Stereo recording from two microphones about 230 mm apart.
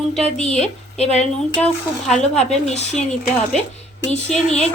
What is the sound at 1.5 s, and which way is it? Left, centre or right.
Speech, centre.